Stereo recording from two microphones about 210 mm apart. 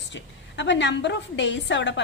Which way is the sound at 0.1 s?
55° left (ahead or behind).